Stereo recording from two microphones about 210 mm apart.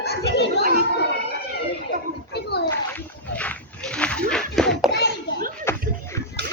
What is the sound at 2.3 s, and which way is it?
Children playing, 50° left (ahead or behind).